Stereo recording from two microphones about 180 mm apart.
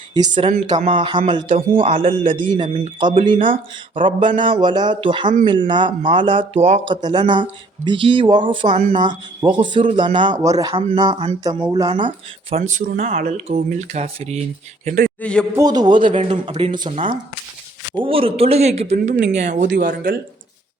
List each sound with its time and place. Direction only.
0.1 s a man's voice: 25° right (ahead or behind)
0.5 s a man's voice: 40° right (ahead or behind)
6.6 s speech: 40° right (ahead or behind)
6.8 s a man's voice: 25° right (ahead or behind); by 15.1 s 45° right (ahead or behind)
15.2 s a man's voice: 5° left (ahead or behind)
15.5 s a man's voice: 20° right (ahead or behind)
16.0 s speech: 45° right (ahead or behind); by 16.9 s 25° right (ahead or behind)
16.9 s speech: 40° right (ahead or behind)
17.9 s speech: 30° right (ahead or behind)
19.6 s speech: 70° right (ahead or behind)